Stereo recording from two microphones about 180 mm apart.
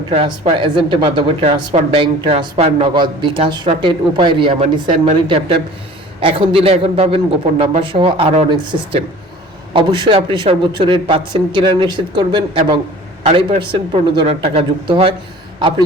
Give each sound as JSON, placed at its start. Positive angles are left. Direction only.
{"t": 0.1, "sound": "speech", "side_deg": -35}
{"t": 6.1, "sound": "a man's voice", "side_deg": -30}